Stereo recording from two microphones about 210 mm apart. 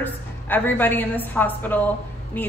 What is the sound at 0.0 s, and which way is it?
A woman's voice, 10° left (ahead or behind).